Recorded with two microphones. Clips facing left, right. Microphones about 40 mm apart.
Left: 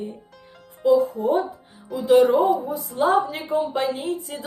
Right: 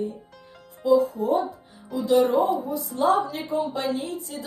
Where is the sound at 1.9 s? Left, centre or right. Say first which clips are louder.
Even; centre.